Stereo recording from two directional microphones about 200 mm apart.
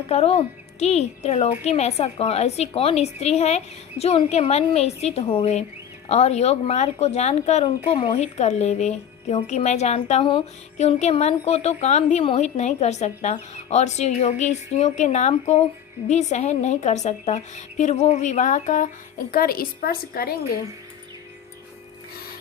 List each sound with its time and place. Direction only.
0.1 s a woman's voice: 30° left (ahead or behind); by 20.3 s 50° left (ahead or behind)